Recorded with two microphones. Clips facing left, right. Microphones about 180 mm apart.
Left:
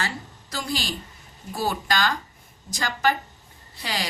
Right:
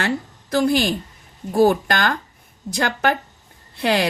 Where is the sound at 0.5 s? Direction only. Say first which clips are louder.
Right 12 dB; 55° right (ahead or behind).